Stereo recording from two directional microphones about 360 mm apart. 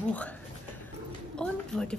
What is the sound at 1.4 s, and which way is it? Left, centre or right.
Speech, centre.